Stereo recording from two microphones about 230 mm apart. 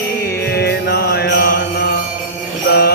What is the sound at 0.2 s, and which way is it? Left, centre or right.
Mantra, left.